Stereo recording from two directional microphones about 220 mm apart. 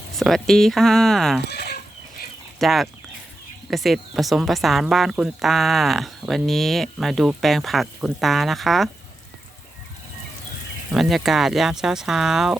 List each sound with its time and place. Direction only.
0.2 s speech: centre (ahead or behind)
1.5 s chicken: 45° left (ahead or behind)
2.6 s speech: centre (ahead or behind)
10.9 s speech: centre (ahead or behind)